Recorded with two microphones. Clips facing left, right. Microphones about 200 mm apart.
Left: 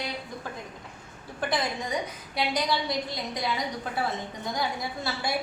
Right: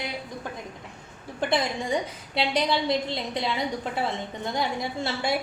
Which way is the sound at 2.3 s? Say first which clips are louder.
Right 3 dB; 25° right (ahead or behind).